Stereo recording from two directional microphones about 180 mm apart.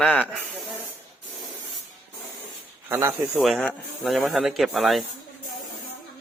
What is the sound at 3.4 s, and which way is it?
Speech, centre (ahead or behind).